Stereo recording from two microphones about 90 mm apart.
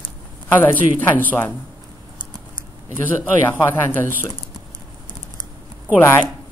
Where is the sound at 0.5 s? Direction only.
20° left (ahead or behind).